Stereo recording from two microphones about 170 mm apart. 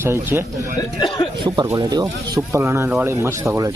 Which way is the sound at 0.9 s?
25° left (ahead or behind).